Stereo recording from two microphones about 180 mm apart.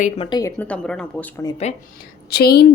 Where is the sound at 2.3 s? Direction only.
60° left (ahead or behind).